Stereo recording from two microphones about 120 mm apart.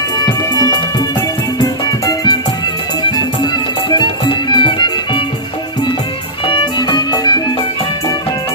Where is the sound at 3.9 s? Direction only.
40° left (ahead or behind).